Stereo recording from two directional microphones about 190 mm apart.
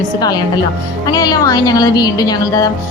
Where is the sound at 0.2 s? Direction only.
20° left (ahead or behind).